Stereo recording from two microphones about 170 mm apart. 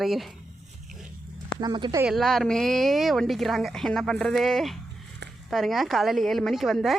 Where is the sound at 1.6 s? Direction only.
25° right (ahead or behind).